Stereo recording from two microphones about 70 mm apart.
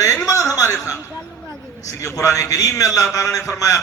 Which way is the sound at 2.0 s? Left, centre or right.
Left.